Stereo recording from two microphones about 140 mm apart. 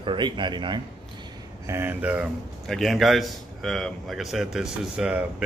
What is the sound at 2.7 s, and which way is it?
Speech, centre (ahead or behind).